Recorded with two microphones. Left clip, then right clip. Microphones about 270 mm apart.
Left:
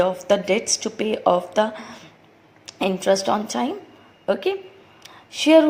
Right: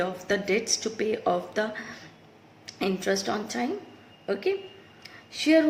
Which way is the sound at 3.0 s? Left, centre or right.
Centre.